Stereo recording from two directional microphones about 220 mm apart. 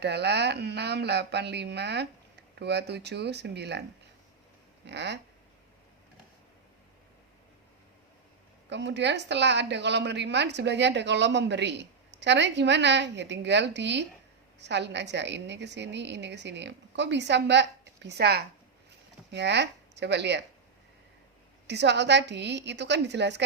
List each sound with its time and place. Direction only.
0.0 s a woman's voice: 50° right (ahead or behind)
4.9 s a woman's voice: 50° right (ahead or behind)
8.7 s a woman's voice: 55° right (ahead or behind)
21.7 s a woman's voice: 50° right (ahead or behind)